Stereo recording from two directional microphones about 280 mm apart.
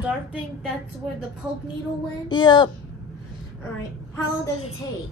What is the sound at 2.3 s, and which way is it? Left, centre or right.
Speech, centre.